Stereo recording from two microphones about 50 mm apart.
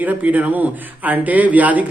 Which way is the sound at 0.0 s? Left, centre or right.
Right.